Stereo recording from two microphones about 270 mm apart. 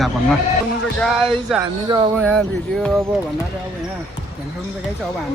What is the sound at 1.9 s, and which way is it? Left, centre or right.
Speech, centre.